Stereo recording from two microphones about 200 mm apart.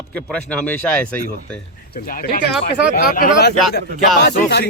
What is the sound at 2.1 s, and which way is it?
A man's voice, 45° left (ahead or behind).